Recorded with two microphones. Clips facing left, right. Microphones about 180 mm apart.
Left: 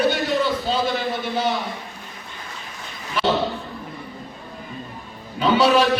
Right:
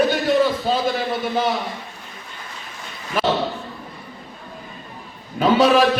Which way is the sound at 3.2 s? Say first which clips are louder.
Right 1 dB; 45° right (ahead or behind).